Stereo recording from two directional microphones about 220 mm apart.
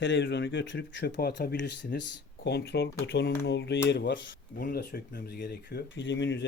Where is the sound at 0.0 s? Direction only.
55° left (ahead or behind).